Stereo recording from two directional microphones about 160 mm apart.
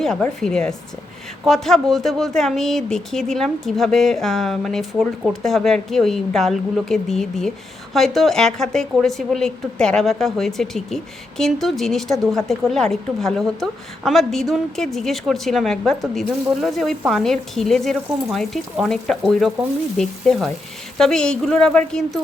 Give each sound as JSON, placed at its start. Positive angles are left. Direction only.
{"t": 0.0, "sound": "a woman's voice", "side_deg": 5}